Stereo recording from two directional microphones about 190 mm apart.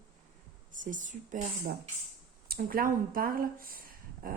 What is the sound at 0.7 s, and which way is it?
A woman's voice, 45° right (ahead or behind).